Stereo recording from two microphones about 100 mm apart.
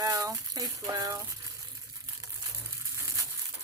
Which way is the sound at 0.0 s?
35° right (ahead or behind).